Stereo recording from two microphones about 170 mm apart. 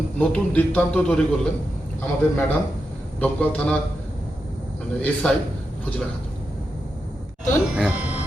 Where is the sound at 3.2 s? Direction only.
5° left (ahead or behind).